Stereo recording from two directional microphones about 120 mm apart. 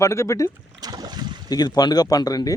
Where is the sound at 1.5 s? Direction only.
35° left (ahead or behind).